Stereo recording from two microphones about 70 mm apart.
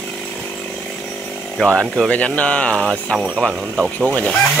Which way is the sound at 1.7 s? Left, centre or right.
Centre.